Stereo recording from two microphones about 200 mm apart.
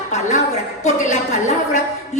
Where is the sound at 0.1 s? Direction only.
35° left (ahead or behind).